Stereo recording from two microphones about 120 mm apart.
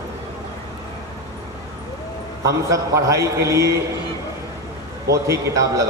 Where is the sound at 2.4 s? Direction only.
25° right (ahead or behind).